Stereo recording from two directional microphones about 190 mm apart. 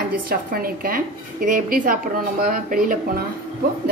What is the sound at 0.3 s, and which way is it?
A woman's voice, 50° right (ahead or behind).